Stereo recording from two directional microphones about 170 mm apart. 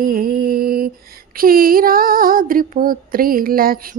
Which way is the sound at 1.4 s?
60° right (ahead or behind).